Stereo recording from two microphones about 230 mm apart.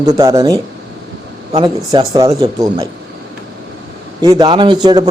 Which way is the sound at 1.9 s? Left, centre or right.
Centre.